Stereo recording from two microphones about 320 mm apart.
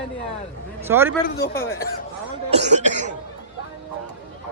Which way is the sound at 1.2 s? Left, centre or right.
Left.